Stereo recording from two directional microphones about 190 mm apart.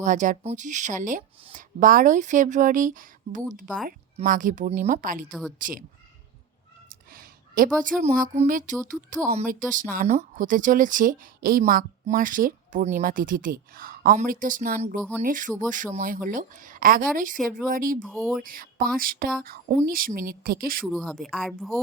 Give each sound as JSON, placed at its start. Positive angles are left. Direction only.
{"t": 0.0, "sound": "a woman's voice", "side_deg": -40}
{"t": 6.8, "sound": "a sound", "side_deg": -50}
{"t": 8.0, "sound": "a woman's voice", "side_deg": -40}
{"t": 18.0, "sound": "speech", "side_deg": 5}
{"t": 18.4, "sound": "a woman's voice", "side_deg": -50}
{"t": 20.8, "sound": "speech", "side_deg": 0}